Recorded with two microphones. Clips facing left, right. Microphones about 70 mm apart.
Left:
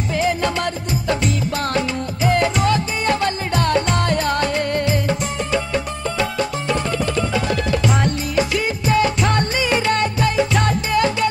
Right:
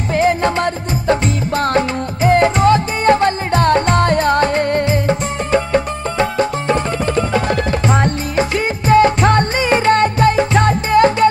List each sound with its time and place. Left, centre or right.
0.1 s music: right